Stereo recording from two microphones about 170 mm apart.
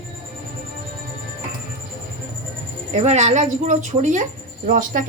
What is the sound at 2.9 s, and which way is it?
A woman's voice, 40° right (ahead or behind).